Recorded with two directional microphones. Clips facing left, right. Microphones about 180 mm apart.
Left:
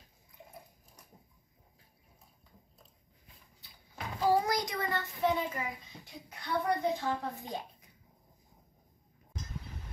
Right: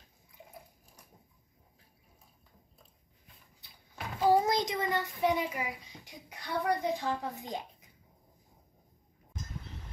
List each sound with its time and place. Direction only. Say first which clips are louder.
4.3 s a child's voice: right 3 dB; 20° right (ahead or behind)